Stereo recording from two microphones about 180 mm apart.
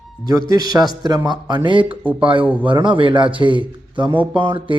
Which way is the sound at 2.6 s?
25° right (ahead or behind).